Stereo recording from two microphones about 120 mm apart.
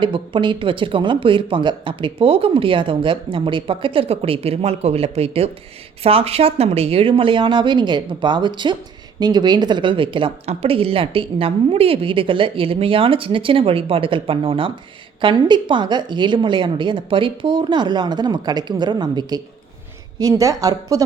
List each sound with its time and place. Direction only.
0.0 s a woman's voice: 45° right (ahead or behind)
10.5 s a woman's voice: 55° right (ahead or behind); by 21.0 s 30° right (ahead or behind)